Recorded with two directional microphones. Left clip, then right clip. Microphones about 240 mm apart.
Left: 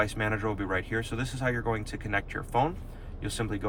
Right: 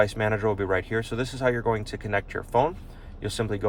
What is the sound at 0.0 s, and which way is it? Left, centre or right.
Speech, right.